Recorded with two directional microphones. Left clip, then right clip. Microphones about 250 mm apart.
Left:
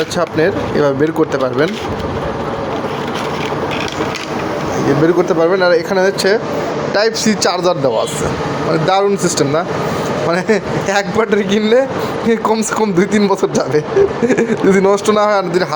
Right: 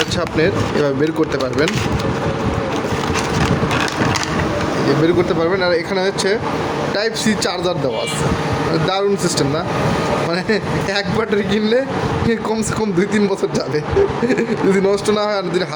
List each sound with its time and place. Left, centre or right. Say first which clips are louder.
0.2 s a man's voice: left 6 dB; centre
5.0 s a man's voice: left 7 dB; centre
8.9 s a man's voice: left 4 dB; centre
10.5 s a man's voice: left 4 dB; centre